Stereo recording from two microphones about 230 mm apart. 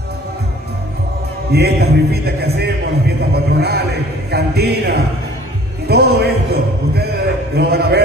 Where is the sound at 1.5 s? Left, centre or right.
Right.